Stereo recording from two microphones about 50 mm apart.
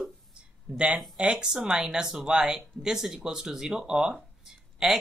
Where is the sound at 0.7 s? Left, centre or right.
Centre.